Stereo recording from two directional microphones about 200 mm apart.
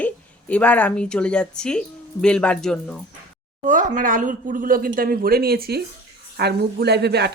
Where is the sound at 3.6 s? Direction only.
40° right (ahead or behind).